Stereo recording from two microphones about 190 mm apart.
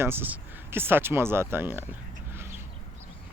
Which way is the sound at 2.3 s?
10° right (ahead or behind).